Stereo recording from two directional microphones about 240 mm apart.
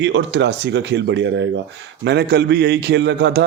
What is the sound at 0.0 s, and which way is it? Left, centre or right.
A man's voice, right.